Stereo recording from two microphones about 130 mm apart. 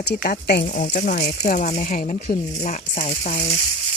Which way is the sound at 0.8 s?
90° left.